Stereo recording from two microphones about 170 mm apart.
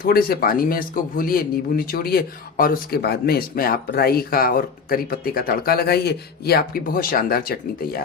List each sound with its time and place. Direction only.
0.0 s speech: 60° left (ahead or behind)